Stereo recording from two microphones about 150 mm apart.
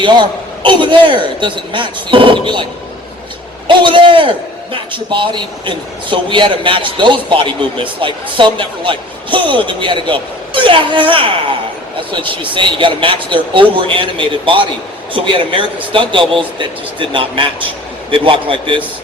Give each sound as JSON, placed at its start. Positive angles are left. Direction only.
{"t": 0.0, "sound": "a man's voice", "side_deg": -30}
{"t": 3.7, "sound": "a man's voice", "side_deg": -35}